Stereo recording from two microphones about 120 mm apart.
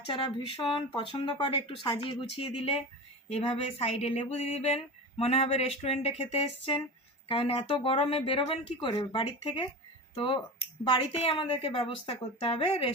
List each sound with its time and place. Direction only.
0.1 s speech: 40° left (ahead or behind)